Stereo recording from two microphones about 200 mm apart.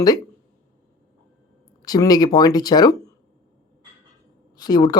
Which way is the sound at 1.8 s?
20° left (ahead or behind).